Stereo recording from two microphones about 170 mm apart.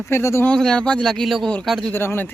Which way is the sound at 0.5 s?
5° left (ahead or behind).